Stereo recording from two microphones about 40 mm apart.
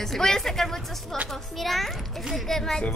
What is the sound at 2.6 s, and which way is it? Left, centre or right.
Speech, centre.